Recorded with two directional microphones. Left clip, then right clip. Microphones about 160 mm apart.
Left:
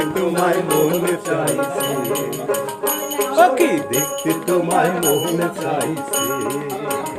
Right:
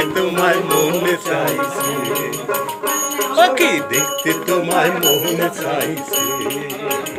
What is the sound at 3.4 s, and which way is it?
Speech, 60° left (ahead or behind).